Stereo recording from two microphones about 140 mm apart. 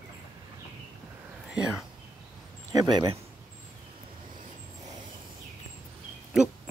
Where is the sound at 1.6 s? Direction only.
5° right (ahead or behind).